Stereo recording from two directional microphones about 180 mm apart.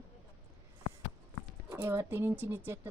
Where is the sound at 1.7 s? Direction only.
10° right (ahead or behind).